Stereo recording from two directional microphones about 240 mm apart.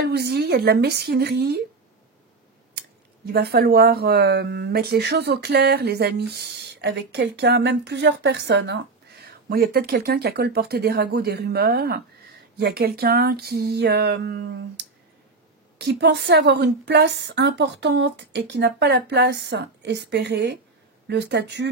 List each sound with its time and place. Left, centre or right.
0.0 s speech: right
3.3 s speech: right